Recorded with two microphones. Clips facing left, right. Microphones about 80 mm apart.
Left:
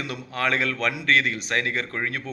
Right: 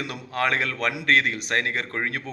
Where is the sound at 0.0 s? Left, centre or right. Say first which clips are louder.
Right 1 dB; right.